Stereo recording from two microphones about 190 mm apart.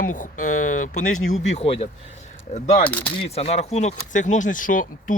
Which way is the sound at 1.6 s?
30° left (ahead or behind).